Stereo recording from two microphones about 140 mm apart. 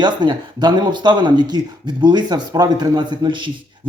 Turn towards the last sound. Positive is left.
turn(degrees=-35)  # may be behind; listen again after turning